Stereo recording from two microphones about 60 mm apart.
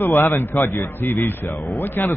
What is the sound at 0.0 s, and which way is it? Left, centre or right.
A man's voice, left.